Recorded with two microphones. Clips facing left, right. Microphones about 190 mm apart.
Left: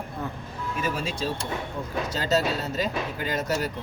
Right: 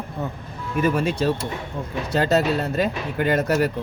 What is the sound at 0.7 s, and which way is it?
Speech, 55° right (ahead or behind).